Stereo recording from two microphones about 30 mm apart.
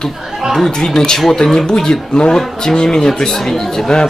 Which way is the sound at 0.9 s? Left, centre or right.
Left.